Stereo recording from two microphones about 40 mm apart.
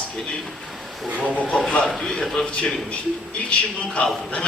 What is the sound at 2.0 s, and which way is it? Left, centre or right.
Speech, left.